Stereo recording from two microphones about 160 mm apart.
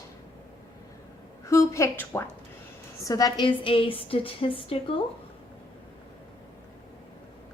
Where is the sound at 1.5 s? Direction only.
20° left (ahead or behind); by 5.0 s 35° left (ahead or behind).